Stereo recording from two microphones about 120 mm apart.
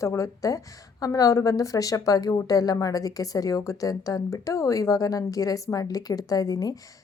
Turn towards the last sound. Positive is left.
turn(degrees=30)  # may be behind; listen again after turning